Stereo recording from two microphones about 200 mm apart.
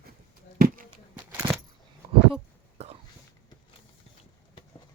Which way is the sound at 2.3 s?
30° right (ahead or behind).